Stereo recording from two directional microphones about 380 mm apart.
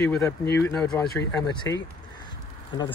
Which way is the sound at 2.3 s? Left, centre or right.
Centre.